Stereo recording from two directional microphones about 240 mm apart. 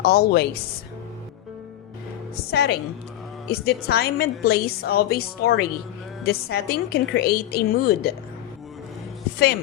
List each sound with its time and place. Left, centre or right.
0.0 s a woman's voice: left
2.3 s a woman's voice: left